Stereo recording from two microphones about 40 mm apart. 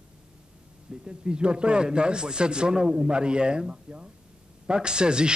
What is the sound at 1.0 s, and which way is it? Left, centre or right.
Speech, right.